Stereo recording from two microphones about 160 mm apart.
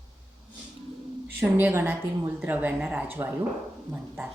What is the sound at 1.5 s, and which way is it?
Speech, 10° right (ahead or behind).